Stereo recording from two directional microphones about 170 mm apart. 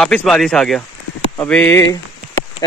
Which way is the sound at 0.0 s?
5° left (ahead or behind).